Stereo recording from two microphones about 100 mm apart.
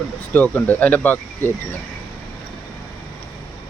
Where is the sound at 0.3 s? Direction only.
15° left (ahead or behind).